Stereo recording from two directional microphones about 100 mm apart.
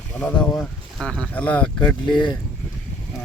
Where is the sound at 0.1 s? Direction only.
15° left (ahead or behind).